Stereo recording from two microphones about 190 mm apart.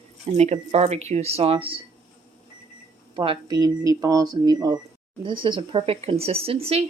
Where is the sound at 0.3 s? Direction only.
35° right (ahead or behind).